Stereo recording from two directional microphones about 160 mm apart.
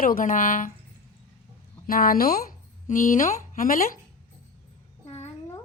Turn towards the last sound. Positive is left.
turn(degrees=40)  # may be behind; listen again after turning